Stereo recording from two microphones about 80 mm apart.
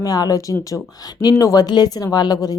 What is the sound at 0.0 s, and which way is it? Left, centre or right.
Speech, left.